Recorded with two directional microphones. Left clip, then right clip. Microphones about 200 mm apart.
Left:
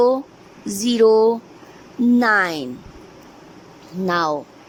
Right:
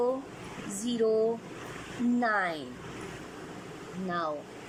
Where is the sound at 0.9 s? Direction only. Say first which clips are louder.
Left 13 dB; 55° left (ahead or behind).